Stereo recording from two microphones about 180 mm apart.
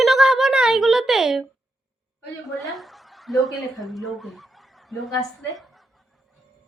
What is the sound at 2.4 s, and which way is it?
A woman's voice, centre (ahead or behind).